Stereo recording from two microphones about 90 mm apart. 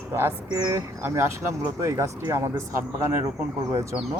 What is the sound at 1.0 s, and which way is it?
Speech, 25° right (ahead or behind).